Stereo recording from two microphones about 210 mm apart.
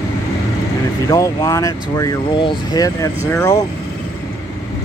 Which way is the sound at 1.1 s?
15° left (ahead or behind).